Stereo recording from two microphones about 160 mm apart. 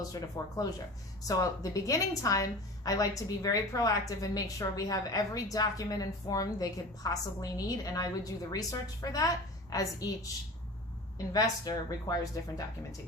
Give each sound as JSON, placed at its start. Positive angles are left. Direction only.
{"t": 0.1, "sound": "a woman's voice", "side_deg": 20}
{"t": 11.3, "sound": "a woman's voice", "side_deg": 25}